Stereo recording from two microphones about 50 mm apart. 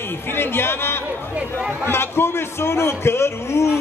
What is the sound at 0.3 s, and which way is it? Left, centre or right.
A man's voice, left.